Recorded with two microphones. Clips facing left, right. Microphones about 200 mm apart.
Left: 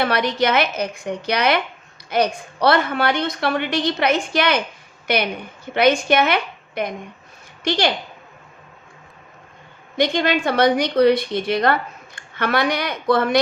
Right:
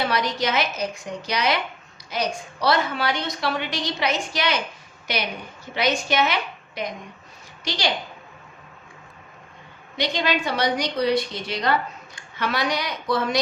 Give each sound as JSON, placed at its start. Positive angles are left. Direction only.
{"t": 0.0, "sound": "a woman's voice", "side_deg": 60}
{"t": 10.0, "sound": "a woman's voice", "side_deg": 55}